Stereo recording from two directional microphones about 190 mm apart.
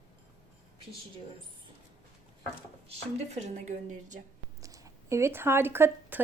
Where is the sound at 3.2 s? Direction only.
35° right (ahead or behind).